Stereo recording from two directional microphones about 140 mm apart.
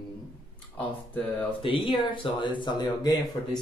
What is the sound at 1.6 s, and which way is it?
Speech, 35° left (ahead or behind).